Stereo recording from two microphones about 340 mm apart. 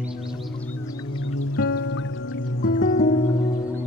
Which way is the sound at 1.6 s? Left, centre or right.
Left.